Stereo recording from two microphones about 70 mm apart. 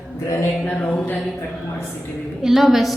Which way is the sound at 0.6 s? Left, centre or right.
Centre.